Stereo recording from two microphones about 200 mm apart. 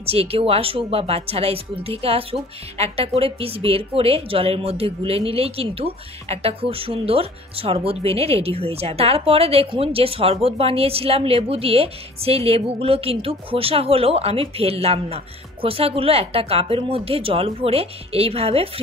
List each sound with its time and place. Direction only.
0.0 s a woman's voice: 30° right (ahead or behind)